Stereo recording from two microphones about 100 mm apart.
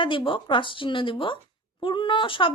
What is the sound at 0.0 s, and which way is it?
A woman's voice, 55° left (ahead or behind).